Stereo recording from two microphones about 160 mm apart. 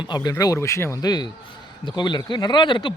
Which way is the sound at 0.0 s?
25° left (ahead or behind).